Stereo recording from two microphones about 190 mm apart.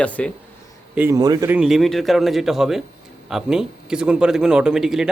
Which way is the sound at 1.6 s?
Centre (ahead or behind).